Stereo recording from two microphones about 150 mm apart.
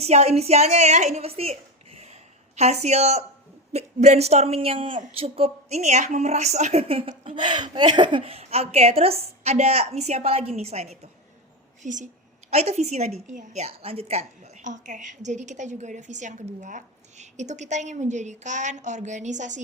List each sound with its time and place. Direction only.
0.0 s a woman's voice: 45° right (ahead or behind)